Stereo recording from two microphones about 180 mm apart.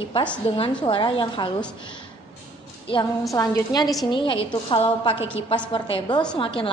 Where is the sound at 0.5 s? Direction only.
30° left (ahead or behind).